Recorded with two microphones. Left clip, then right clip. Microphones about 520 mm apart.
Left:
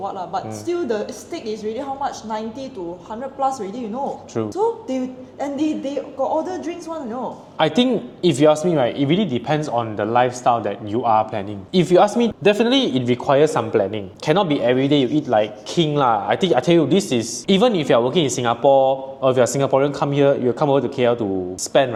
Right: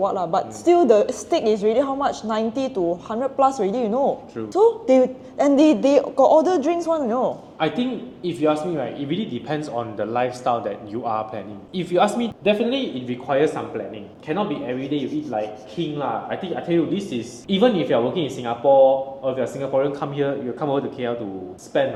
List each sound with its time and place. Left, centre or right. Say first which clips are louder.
0.1 s a woman's voice: right 4 dB; right
7.6 s a man's voice: left 6 dB; left
14.3 s speech: left 8 dB; left
15.3 s speech: left 9 dB; left
16.0 s speech: left 9 dB; left
17.1 s a man's voice: left 7 dB; left